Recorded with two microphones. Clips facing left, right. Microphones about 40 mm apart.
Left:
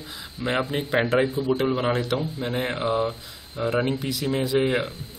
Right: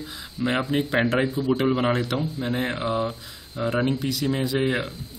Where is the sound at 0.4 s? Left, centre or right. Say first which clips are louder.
Right 2 dB; centre.